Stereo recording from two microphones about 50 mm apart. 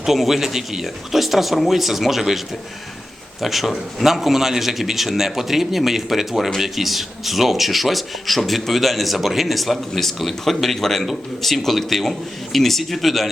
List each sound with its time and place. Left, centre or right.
0.0 s speech: centre
3.4 s speech: centre